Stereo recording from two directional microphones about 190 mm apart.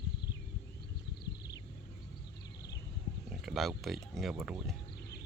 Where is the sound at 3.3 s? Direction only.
Centre (ahead or behind).